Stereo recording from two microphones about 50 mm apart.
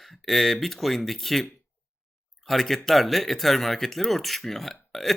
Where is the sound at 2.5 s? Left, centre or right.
Centre.